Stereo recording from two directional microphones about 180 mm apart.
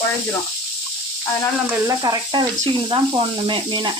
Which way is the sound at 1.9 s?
20° right (ahead or behind).